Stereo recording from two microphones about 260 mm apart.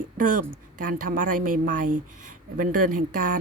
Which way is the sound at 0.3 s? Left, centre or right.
Right.